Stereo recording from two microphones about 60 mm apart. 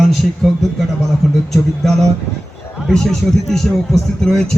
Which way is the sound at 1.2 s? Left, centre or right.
Centre.